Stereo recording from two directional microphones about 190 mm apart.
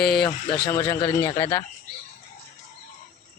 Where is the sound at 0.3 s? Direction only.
25° left (ahead or behind).